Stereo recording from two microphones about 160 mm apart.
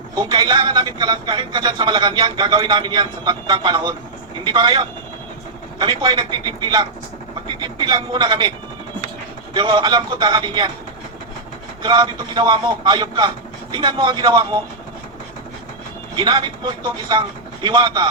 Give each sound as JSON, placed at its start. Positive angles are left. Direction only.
{"t": 0.2, "sound": "speech", "side_deg": -25}
{"t": 6.0, "sound": "speech", "side_deg": -25}
{"t": 9.6, "sound": "speech", "side_deg": -30}
{"t": 11.8, "sound": "speech", "side_deg": -25}
{"t": 16.1, "sound": "speech", "side_deg": -30}